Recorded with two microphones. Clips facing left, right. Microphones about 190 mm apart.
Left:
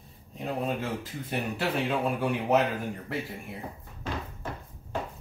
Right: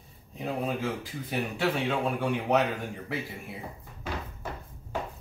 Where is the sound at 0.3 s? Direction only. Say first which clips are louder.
Even; centre (ahead or behind).